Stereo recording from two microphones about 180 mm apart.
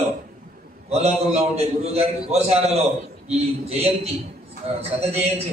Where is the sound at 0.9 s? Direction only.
35° right (ahead or behind).